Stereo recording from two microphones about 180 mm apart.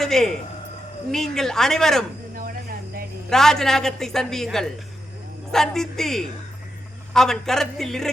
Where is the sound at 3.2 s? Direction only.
Centre (ahead or behind).